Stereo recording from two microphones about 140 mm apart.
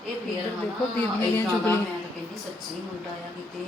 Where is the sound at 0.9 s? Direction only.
15° left (ahead or behind).